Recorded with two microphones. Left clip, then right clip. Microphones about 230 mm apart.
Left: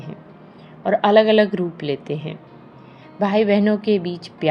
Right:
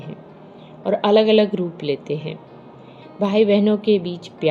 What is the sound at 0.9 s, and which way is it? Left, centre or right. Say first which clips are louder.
Speech: left 1 dB; left.